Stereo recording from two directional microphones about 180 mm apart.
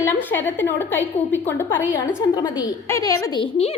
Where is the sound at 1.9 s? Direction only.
25° left (ahead or behind).